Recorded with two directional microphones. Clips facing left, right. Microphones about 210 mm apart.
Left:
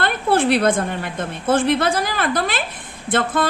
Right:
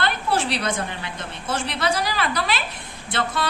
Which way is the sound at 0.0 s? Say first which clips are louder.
Left 6 dB; 55° left (ahead or behind).